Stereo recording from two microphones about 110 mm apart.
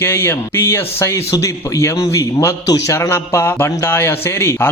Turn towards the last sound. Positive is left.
turn(degrees=20)  # may be behind; listen again after turning